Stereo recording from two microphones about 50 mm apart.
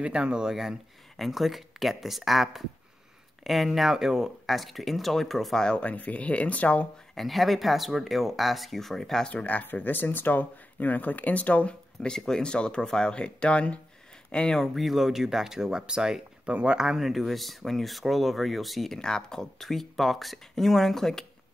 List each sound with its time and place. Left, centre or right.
0.0 s speech: right; by 5.7 s centre
5.7 s speech: left
7.2 s speech: centre
9.3 s speech: left
12.1 s speech: centre
14.6 s speech: centre
18.9 s speech: centre